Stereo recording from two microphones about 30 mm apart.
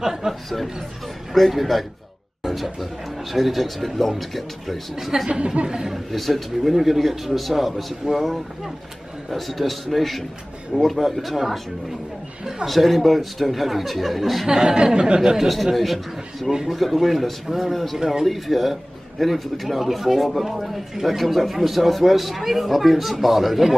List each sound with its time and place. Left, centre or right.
0.0 s speech: centre
0.3 s a man's voice: centre
5.6 s speech: right
6.1 s a man's voice: centre
8.0 s speech: right
9.3 s a man's voice: centre
12.6 s a man's voice: centre
14.5 s speech: right
15.4 s a man's voice: centre
17.9 s speech: centre
18.2 s a man's voice: centre
21.2 s a man's voice: centre